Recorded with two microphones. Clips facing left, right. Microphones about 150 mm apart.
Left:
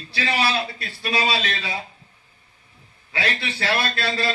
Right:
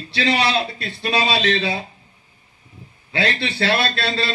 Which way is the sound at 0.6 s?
30° right (ahead or behind).